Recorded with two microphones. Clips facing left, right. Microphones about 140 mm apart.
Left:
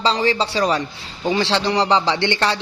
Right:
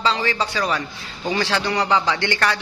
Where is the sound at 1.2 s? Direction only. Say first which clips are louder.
Left 3 dB; 20° left (ahead or behind).